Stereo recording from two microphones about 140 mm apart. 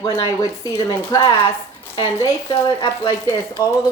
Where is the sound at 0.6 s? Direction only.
25° left (ahead or behind).